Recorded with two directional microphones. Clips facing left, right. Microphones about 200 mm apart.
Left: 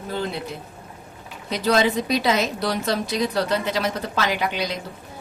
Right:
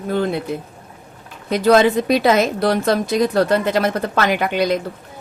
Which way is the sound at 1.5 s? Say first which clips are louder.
Right 7 dB; 55° right (ahead or behind).